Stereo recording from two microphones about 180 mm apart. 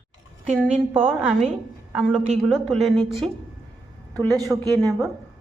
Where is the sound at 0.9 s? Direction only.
5° right (ahead or behind).